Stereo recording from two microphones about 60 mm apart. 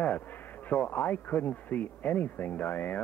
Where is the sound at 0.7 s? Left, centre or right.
Left.